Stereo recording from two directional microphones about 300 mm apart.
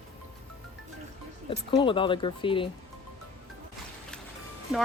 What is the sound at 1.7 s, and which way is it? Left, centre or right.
Speech, centre.